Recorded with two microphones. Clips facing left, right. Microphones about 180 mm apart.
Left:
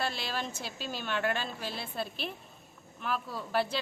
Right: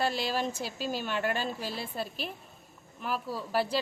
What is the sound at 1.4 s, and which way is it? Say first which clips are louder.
Speech: right 3 dB; 40° right (ahead or behind).